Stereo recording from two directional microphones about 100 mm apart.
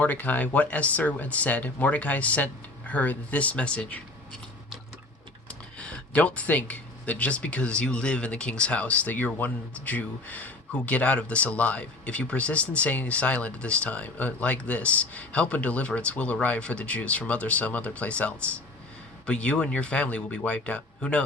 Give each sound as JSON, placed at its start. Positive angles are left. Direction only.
{"t": 0.0, "sound": "speech", "side_deg": 15}
{"t": 5.5, "sound": "speech", "side_deg": 10}